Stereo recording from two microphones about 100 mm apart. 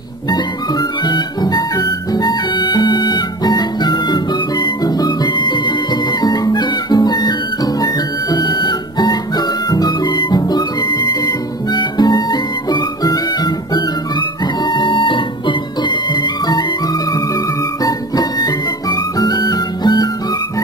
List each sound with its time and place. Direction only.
0.3 s music: 45° left (ahead or behind)
6.2 s music: 40° left (ahead or behind)
17.8 s music: 40° left (ahead or behind)